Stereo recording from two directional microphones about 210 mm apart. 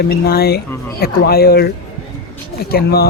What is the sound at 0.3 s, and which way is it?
Speech, 50° left (ahead or behind).